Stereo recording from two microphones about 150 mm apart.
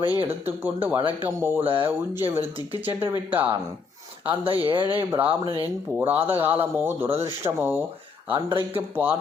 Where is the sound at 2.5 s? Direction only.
35° right (ahead or behind).